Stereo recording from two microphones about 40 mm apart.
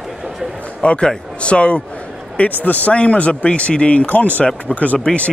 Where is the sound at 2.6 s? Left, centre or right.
Left.